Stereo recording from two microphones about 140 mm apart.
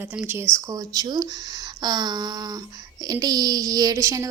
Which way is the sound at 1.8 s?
30° right (ahead or behind).